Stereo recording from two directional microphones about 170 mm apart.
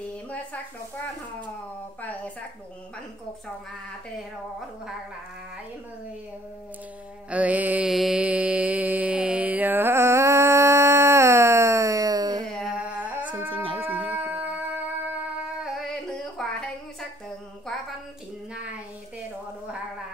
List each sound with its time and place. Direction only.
2.0 s speech: 10° left (ahead or behind)
7.2 s mantra: 10° right (ahead or behind)
12.5 s humming: 5° right (ahead or behind)
13.5 s music: 30° right (ahead or behind)
13.7 s music: 10° right (ahead or behind)
16.4 s a sound: 5° left (ahead or behind)